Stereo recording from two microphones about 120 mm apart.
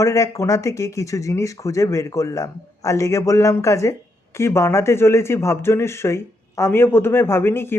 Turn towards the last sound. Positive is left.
turn(degrees=20)  # may be behind; listen again after turning